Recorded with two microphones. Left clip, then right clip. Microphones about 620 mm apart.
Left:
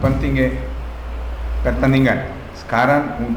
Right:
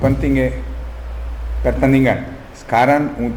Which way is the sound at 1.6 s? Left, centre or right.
Right.